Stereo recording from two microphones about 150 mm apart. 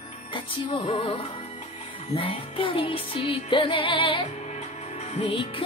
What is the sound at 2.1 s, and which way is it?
Music, 35° left (ahead or behind).